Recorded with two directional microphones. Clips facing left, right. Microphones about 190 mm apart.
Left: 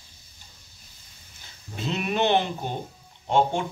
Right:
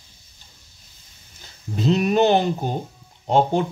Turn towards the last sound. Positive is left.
turn(degrees=-40)  # may be behind; listen again after turning